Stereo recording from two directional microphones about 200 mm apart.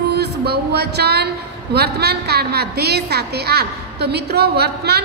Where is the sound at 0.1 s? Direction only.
55° right (ahead or behind).